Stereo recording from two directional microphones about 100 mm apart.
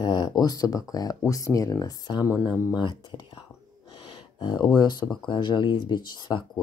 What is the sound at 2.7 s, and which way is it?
Speech, 50° left (ahead or behind).